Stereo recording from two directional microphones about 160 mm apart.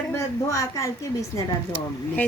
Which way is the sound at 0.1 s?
20° left (ahead or behind).